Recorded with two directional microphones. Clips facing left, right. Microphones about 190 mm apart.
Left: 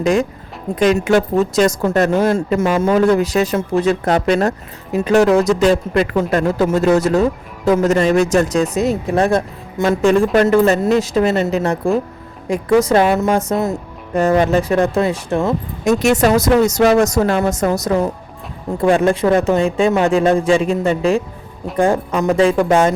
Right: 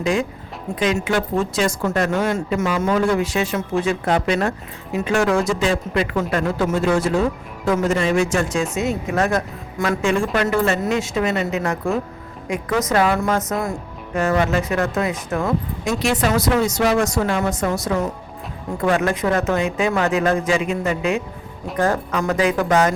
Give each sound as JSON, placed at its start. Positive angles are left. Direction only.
{"t": 0.0, "sound": "speech", "side_deg": 45}
{"t": 3.0, "sound": "speech", "side_deg": 40}
{"t": 10.0, "sound": "speech", "side_deg": 40}
{"t": 14.1, "sound": "speech", "side_deg": 35}
{"t": 15.8, "sound": "speech", "side_deg": 45}